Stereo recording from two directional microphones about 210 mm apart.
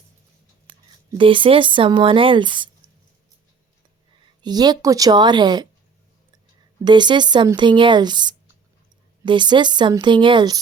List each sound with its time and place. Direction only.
1.1 s speech: 25° right (ahead or behind)
4.4 s speech: 20° right (ahead or behind)
6.8 s speech: 20° right (ahead or behind)